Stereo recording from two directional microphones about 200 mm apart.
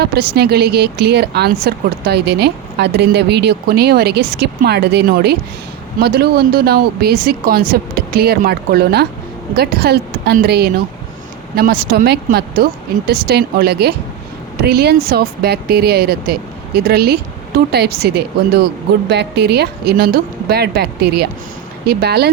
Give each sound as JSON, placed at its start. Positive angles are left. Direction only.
{"t": 0.0, "sound": "speech", "side_deg": -55}